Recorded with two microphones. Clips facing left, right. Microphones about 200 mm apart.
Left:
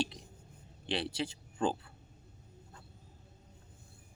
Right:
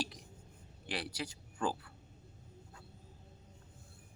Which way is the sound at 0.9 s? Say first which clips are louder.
Left 5 dB; 25° left (ahead or behind).